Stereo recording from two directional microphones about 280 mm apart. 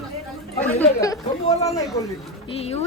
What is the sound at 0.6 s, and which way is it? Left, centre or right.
Speech, centre.